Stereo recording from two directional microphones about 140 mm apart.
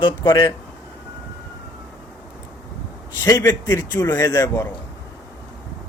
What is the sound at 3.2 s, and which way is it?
A man's voice, 25° left (ahead or behind).